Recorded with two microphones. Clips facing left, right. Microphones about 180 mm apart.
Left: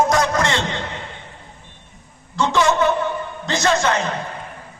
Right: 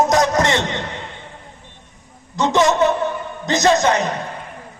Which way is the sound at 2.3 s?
20° right (ahead or behind).